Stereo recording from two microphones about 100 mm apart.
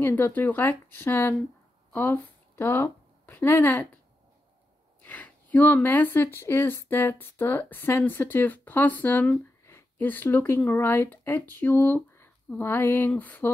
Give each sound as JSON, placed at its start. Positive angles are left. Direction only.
{"t": 0.0, "sound": "speech", "side_deg": 20}
{"t": 5.0, "sound": "speech", "side_deg": 15}